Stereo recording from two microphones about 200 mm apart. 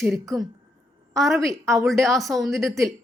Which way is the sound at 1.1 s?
Centre (ahead or behind).